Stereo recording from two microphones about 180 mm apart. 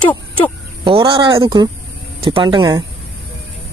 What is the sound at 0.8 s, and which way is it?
Speech, 30° right (ahead or behind).